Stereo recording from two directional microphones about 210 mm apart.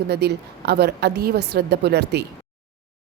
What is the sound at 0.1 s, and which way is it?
A woman's voice, 50° right (ahead or behind).